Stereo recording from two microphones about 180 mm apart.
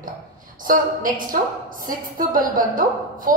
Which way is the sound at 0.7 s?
50° right (ahead or behind).